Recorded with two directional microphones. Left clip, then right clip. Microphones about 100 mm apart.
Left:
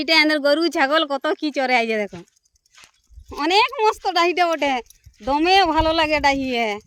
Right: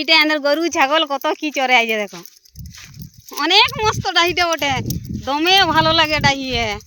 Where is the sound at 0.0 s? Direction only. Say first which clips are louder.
Right 2 dB; 25° left (ahead or behind).